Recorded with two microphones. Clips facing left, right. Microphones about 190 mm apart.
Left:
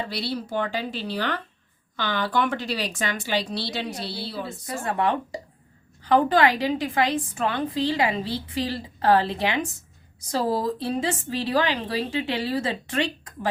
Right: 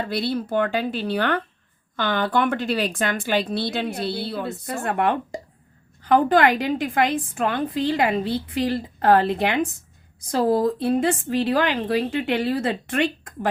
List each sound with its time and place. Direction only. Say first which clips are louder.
0.0 s a woman's voice: right 5 dB; 50° right (ahead or behind)